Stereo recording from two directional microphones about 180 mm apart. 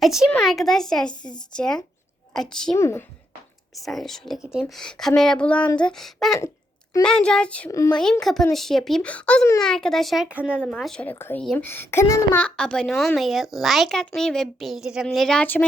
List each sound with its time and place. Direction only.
0.0 s a woman's voice: centre (ahead or behind)
2.7 s speech: 15° left (ahead or behind)
3.8 s a woman's voice: centre (ahead or behind)
7.7 s speech: 15° left (ahead or behind)
8.2 s a woman's voice: centre (ahead or behind)